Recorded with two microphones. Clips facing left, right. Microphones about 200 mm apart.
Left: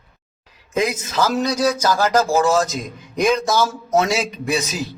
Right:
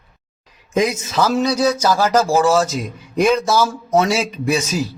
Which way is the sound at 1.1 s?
25° right (ahead or behind).